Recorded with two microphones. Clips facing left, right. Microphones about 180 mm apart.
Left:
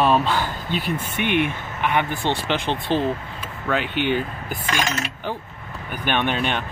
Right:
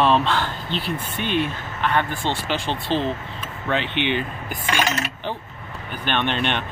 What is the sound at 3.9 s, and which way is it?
Speech, 45° left (ahead or behind).